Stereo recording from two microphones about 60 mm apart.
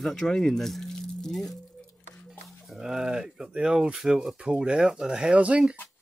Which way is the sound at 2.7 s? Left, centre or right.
Centre.